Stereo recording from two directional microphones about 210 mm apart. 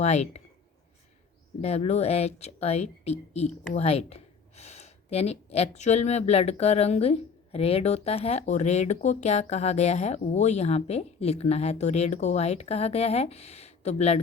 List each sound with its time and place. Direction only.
0.0 s speech: 30° left (ahead or behind)
1.6 s speech: 30° left (ahead or behind)